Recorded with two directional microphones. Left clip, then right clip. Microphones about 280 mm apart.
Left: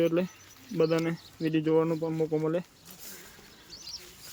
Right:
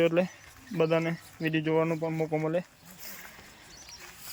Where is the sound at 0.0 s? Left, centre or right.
Centre.